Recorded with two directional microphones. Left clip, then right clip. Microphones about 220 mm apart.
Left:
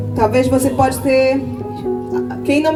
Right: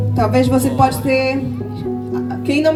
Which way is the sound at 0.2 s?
35° left (ahead or behind).